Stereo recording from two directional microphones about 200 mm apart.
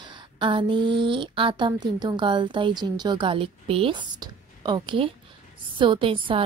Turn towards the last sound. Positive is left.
turn(degrees=-25)  # may be behind; listen again after turning